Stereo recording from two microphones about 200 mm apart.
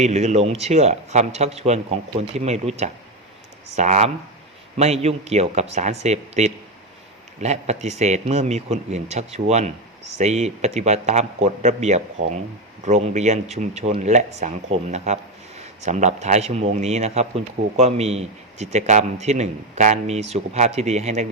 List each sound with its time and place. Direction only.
0.0 s speech: 35° right (ahead or behind)